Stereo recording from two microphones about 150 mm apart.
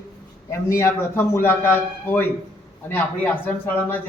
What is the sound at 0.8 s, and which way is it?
Speech, 15° left (ahead or behind).